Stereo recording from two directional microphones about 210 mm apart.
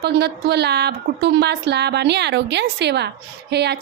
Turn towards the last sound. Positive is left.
turn(degrees=-50)  # may be behind; listen again after turning